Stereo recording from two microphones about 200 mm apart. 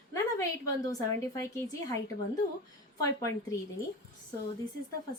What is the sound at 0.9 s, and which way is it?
Speech, 15° left (ahead or behind).